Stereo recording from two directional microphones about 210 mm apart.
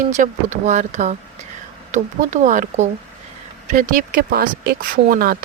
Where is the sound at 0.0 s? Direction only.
35° right (ahead or behind).